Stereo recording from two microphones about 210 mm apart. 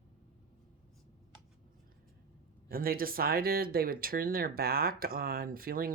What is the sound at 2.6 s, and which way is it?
Speech, 45° right (ahead or behind).